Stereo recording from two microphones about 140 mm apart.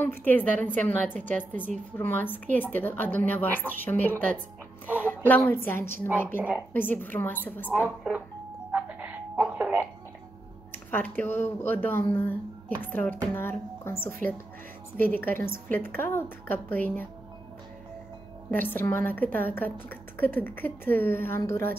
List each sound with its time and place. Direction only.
0.0 s speech: 15° left (ahead or behind)
2.0 s speech: 15° left (ahead or behind)
7.8 s speech: 10° right (ahead or behind)
8.7 s music: 10° right (ahead or behind)
10.7 s speech: 15° left (ahead or behind)
18.5 s speech: 15° left (ahead or behind)